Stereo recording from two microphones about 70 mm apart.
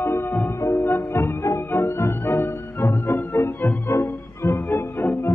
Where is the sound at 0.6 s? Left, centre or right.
Left.